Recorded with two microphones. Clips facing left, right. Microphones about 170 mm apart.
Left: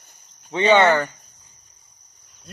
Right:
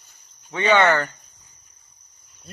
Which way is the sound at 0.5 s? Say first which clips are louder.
Left 2 dB; 20° left (ahead or behind).